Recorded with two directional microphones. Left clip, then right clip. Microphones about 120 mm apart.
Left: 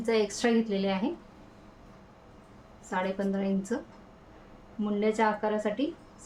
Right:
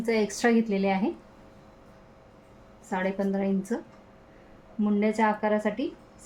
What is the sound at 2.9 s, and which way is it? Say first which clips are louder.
Speech: right 2 dB; 40° right (ahead or behind).